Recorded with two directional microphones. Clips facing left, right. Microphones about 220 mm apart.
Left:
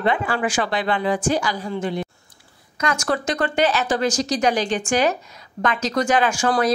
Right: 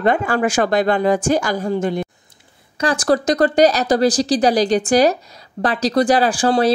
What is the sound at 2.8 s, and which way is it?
Speech, 35° right (ahead or behind).